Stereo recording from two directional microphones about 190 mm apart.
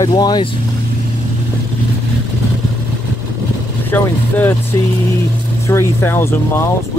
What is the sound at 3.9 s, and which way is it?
Speech, 10° left (ahead or behind).